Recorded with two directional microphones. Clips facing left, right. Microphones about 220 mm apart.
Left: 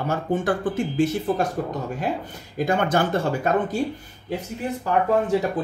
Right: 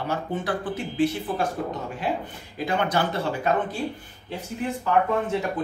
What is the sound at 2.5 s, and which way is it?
Speech, 45° left (ahead or behind).